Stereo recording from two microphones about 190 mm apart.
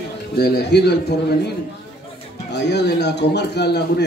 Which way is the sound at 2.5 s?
60° left (ahead or behind).